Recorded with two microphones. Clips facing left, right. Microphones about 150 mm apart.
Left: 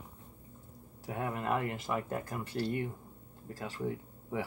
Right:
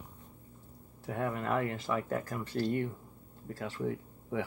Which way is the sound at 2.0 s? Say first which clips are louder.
Right 2 dB; 20° left (ahead or behind).